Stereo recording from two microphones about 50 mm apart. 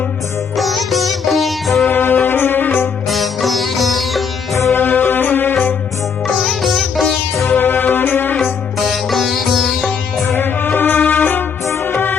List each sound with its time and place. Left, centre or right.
0.5 s sitar: centre
1.9 s music: left
3.1 s sitar: centre
4.7 s music: left
6.2 s sitar: centre
7.4 s music: left
8.8 s sitar: centre
10.2 s music: left